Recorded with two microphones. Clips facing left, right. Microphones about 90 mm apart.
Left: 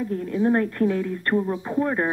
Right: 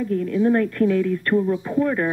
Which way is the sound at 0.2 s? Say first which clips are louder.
Right 2 dB; 25° left (ahead or behind).